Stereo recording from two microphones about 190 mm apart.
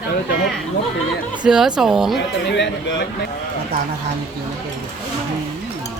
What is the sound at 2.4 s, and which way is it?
Speech, 70° left (ahead or behind).